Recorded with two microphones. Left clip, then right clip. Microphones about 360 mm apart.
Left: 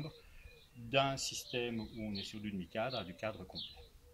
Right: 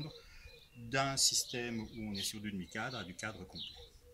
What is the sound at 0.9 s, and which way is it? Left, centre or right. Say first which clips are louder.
Speech: right 1 dB; centre.